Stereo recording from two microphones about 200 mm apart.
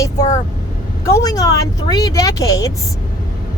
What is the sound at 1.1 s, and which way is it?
A woman's voice, 15° left (ahead or behind).